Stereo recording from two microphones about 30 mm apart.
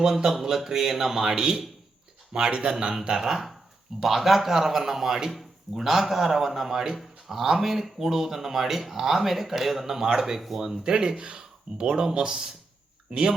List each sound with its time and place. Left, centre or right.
0.0 s speech: centre
3.2 s speech: centre; by 13.3 s right